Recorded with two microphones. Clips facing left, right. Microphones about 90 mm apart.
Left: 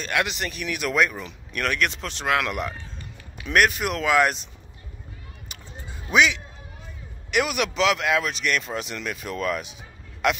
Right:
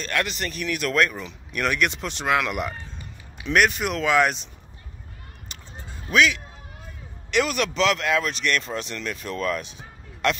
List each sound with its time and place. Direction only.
0.0 s speech: 10° left (ahead or behind)
1.5 s speech: 5° right (ahead or behind)
5.5 s a sound: 10° left (ahead or behind)
6.0 s a man's voice: 20° left (ahead or behind)